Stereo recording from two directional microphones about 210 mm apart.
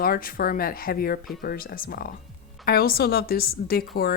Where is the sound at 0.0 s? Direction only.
45° left (ahead or behind).